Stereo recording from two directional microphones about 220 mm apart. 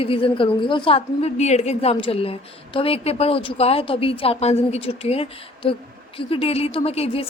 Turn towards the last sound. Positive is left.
turn(degrees=25)  # may be behind; listen again after turning